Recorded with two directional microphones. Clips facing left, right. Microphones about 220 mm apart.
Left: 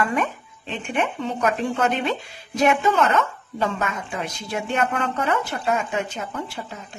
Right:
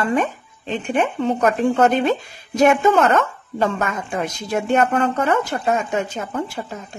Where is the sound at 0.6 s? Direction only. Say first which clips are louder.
Right 5 dB; 40° right (ahead or behind).